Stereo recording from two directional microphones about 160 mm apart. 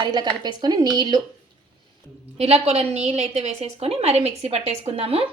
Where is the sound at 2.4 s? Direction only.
40° right (ahead or behind).